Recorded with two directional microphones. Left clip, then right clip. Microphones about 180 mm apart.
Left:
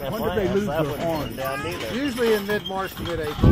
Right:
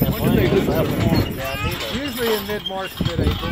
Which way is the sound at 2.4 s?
15° left (ahead or behind).